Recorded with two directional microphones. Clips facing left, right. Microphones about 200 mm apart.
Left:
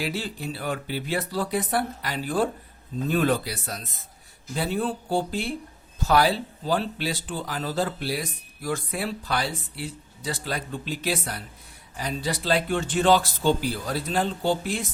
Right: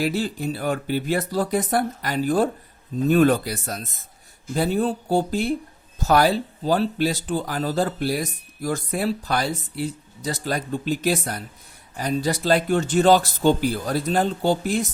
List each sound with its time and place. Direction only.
0.0 s speech: 45° right (ahead or behind)